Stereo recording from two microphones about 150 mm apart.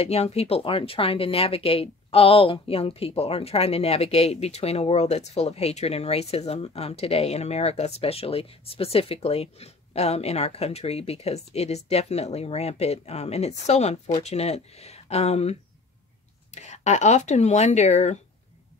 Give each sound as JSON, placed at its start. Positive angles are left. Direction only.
{"t": 0.0, "sound": "speech", "side_deg": 45}
{"t": 16.5, "sound": "speech", "side_deg": 50}